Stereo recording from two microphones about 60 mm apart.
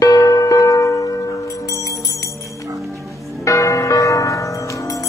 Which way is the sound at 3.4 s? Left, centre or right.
Left.